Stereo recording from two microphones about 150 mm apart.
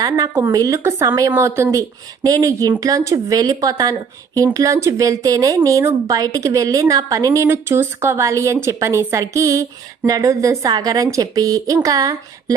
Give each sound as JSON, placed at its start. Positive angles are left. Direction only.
{"t": 0.0, "sound": "a woman's voice", "side_deg": -20}